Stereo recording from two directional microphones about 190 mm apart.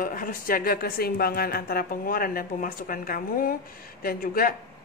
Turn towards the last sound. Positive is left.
turn(degrees=50)  # may be behind; listen again after turning